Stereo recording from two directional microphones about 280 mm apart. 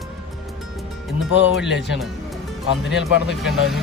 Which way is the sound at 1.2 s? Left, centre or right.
Centre.